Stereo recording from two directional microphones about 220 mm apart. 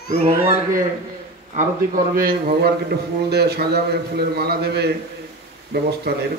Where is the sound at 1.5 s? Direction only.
35° right (ahead or behind).